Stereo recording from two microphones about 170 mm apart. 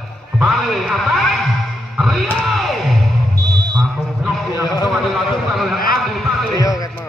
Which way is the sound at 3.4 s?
25° right (ahead or behind).